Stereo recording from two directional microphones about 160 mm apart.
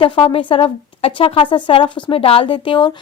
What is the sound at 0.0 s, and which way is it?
Speech, 35° left (ahead or behind).